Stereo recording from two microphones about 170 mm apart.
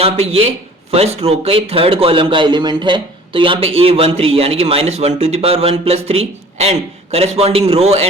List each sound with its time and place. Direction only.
0.0 s speech: 35° right (ahead or behind)